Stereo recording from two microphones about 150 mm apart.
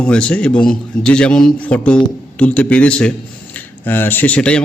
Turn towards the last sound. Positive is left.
turn(degrees=5)  # may be behind; listen again after turning